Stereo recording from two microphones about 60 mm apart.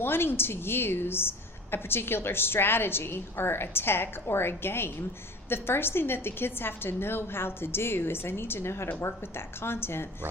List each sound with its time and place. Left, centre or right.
0.0 s a woman's voice: left